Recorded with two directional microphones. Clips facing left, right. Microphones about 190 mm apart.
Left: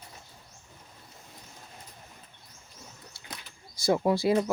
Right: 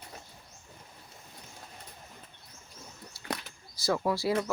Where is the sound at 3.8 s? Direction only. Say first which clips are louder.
Left 4 dB; 20° left (ahead or behind).